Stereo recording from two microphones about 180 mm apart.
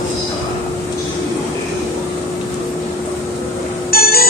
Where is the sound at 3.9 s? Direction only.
60° left (ahead or behind).